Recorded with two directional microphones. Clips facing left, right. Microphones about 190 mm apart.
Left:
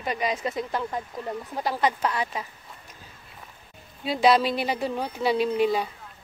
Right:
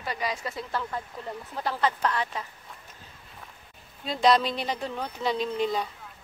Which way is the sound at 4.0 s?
5° left (ahead or behind).